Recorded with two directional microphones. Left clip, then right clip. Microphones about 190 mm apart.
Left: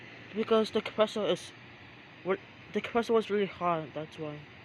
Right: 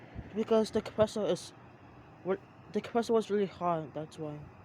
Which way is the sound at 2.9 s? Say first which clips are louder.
Left 2 dB; 15° right (ahead or behind).